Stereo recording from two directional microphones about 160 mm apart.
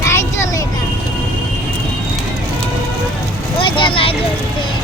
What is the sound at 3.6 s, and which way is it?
Speech, 30° left (ahead or behind).